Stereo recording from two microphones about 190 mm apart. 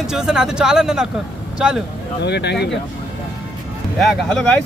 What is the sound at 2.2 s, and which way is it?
Speech, 65° left (ahead or behind).